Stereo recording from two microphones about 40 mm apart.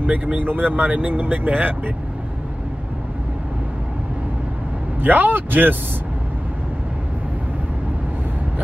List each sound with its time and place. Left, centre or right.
0.0 s speech: right
5.0 s speech: right